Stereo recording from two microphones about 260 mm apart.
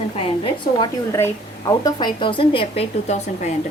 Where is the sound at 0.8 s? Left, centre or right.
Centre.